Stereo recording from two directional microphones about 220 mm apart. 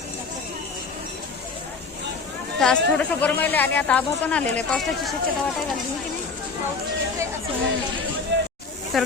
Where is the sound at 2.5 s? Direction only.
5° left (ahead or behind).